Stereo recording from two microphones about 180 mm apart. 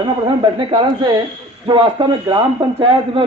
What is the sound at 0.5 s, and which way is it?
A man's voice, 25° right (ahead or behind).